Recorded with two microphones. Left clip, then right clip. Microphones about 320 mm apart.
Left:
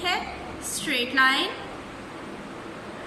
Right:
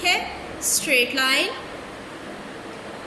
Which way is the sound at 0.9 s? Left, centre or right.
Left.